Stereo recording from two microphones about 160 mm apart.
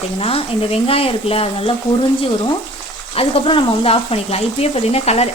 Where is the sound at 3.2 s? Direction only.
35° left (ahead or behind).